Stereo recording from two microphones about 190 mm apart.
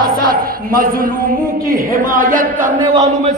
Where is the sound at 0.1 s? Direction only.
50° right (ahead or behind).